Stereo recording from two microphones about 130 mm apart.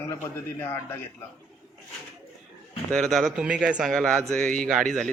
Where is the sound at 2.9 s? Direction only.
5° left (ahead or behind).